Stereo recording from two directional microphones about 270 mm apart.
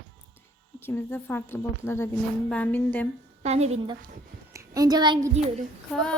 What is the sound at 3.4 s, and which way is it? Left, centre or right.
Speech, right.